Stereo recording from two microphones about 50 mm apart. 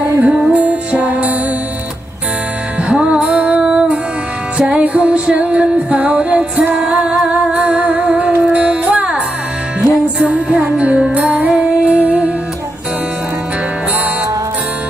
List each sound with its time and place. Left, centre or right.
0.2 s music: right
2.9 s music: centre
9.8 s music: centre
10.5 s music: centre